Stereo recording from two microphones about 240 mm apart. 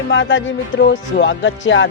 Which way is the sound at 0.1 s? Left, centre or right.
Left.